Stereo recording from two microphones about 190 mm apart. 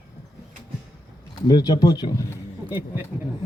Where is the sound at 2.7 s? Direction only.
10° right (ahead or behind).